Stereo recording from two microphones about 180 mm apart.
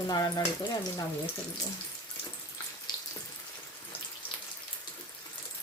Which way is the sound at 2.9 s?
25° left (ahead or behind).